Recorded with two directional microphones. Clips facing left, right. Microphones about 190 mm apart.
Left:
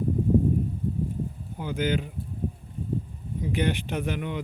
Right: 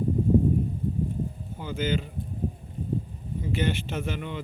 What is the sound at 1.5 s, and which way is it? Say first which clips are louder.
Speech: left 2 dB; 15° left (ahead or behind).